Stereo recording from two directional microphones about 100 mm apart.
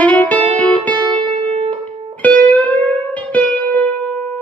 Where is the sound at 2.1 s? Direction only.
15° left (ahead or behind).